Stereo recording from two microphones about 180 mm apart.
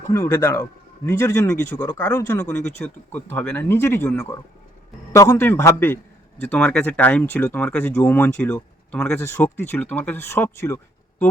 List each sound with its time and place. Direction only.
0.1 s speech: 15° left (ahead or behind)